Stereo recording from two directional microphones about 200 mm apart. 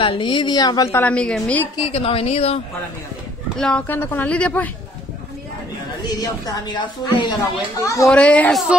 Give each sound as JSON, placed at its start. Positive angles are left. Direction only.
{"t": 0.0, "sound": "a woman's voice", "side_deg": 25}
{"t": 1.8, "sound": "a woman's voice", "side_deg": 30}
{"t": 3.5, "sound": "speech", "side_deg": 5}
{"t": 6.0, "sound": "a woman's voice", "side_deg": 20}